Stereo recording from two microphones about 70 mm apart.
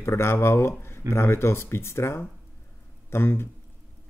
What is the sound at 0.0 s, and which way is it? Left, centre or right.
Speech, left.